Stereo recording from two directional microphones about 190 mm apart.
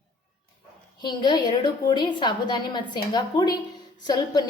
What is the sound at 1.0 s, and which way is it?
A woman's voice, 25° left (ahead or behind).